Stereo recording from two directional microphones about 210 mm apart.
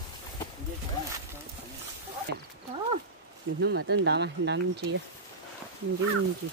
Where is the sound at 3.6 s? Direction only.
60° right (ahead or behind).